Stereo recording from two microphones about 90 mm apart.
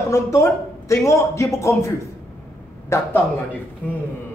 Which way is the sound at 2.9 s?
30° left (ahead or behind).